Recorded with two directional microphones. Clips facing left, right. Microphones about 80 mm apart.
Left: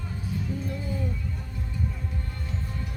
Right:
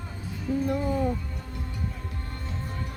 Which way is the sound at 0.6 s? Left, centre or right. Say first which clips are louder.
Right 7 dB; right.